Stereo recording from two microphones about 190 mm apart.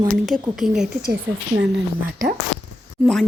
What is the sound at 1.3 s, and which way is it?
Speech, 70° right (ahead or behind).